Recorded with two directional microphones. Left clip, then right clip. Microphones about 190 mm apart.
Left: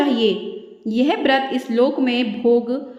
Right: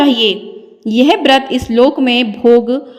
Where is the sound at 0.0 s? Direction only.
40° right (ahead or behind).